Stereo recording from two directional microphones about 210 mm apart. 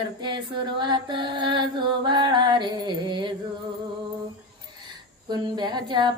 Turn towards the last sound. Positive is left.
turn(degrees=-20)  # may be behind; listen again after turning